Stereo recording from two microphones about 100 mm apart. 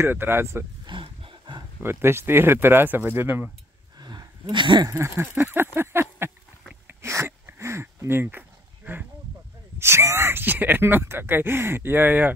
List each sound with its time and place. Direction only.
0.0 s speech: 25° right (ahead or behind)
0.8 s wild animals: 60° right (ahead or behind)
1.8 s speech: 25° right (ahead or behind)
4.0 s a sound: 50° right (ahead or behind)
4.8 s speech: 30° right (ahead or behind)
5.3 s a sound: 20° right (ahead or behind)
9.8 s speech: 25° right (ahead or behind)